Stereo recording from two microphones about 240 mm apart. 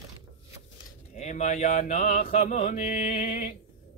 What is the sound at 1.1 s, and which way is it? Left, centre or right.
Mantra, left.